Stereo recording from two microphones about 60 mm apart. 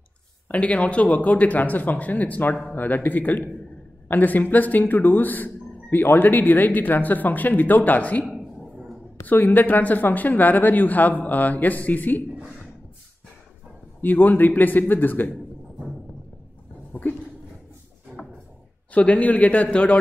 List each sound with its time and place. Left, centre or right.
0.5 s speech: left
14.0 s speech: left
18.9 s speech: left